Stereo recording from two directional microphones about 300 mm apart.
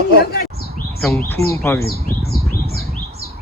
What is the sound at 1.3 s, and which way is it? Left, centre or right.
Speech, centre.